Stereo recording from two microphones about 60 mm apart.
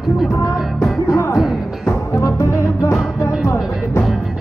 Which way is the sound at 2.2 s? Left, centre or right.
Left.